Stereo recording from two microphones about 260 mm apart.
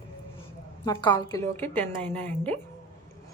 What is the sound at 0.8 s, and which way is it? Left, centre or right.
Speech, centre.